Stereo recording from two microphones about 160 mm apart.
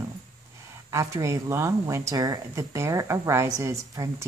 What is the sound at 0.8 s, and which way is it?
Speech, 20° right (ahead or behind).